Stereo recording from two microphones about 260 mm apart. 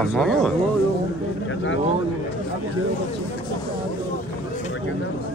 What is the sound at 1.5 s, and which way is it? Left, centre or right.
Speech, left.